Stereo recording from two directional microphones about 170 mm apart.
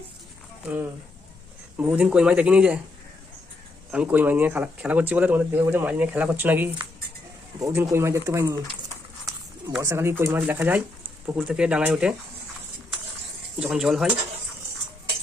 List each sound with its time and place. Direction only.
1.8 s speech: 5° right (ahead or behind)
3.9 s speech: 10° right (ahead or behind)
9.8 s speech: 15° right (ahead or behind)
13.6 s speech: 5° right (ahead or behind)